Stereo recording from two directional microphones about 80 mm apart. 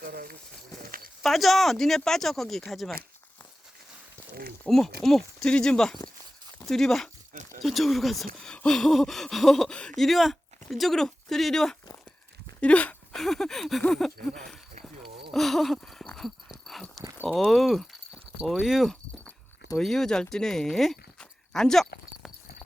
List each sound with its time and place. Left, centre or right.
1.2 s speech: centre
4.7 s speech: centre
12.5 s a sound: centre
13.1 s speech: centre
15.3 s a sound: centre
18.4 s speech: centre